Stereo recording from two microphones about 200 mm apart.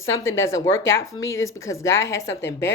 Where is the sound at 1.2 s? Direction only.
70° left (ahead or behind).